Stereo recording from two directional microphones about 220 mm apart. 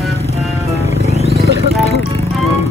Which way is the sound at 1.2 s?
30° right (ahead or behind).